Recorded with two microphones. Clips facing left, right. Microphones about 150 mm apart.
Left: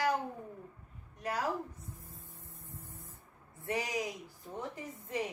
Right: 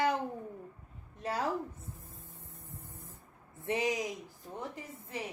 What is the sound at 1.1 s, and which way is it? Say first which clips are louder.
Speech: right 1 dB; 30° right (ahead or behind).